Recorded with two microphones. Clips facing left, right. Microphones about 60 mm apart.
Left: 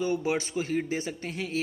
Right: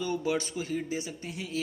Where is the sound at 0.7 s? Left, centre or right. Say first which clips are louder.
Left 3 dB; left.